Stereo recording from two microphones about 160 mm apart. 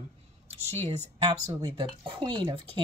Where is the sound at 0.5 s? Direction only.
40° right (ahead or behind).